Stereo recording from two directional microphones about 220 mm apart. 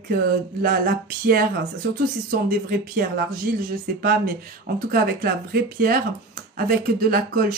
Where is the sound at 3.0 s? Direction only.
40° right (ahead or behind).